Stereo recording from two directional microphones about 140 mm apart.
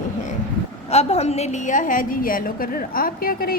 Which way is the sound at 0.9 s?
50° left (ahead or behind).